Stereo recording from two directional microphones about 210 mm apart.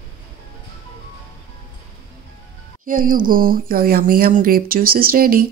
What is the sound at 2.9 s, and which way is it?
Speech, 40° right (ahead or behind).